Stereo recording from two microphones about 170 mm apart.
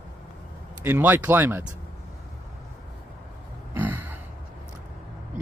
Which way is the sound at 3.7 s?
10° right (ahead or behind).